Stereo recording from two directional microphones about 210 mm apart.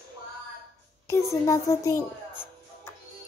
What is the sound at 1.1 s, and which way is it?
A child's voice, 15° left (ahead or behind).